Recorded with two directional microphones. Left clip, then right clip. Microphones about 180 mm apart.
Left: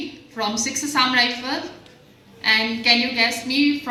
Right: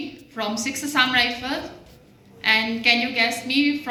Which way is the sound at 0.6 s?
50° right (ahead or behind).